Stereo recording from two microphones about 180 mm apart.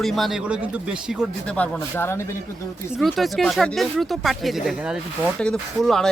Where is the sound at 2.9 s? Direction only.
Centre (ahead or behind).